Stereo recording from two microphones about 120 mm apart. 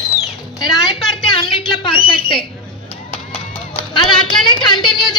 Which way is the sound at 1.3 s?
45° left (ahead or behind).